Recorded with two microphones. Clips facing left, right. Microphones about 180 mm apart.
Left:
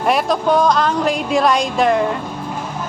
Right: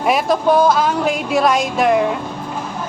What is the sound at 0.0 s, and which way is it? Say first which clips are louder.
Speech: right 1 dB; centre (ahead or behind).